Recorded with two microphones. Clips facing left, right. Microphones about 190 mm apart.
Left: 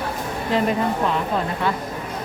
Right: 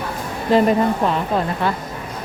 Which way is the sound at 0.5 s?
35° right (ahead or behind).